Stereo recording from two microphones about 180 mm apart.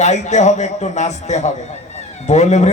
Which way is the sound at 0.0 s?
40° left (ahead or behind).